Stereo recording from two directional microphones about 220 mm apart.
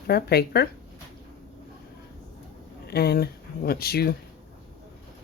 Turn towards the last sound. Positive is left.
turn(degrees=45)  # may be behind; listen again after turning